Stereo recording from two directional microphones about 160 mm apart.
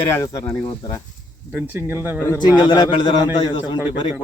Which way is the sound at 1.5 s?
10° right (ahead or behind).